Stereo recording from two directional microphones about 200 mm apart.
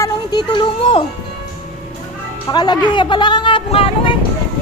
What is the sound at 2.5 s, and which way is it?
Speech, 20° left (ahead or behind).